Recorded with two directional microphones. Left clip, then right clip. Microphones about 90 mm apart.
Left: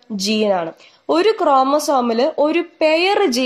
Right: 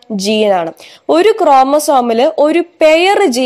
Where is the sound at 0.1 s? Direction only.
35° right (ahead or behind).